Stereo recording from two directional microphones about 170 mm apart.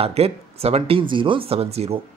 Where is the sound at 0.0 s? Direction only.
35° right (ahead or behind).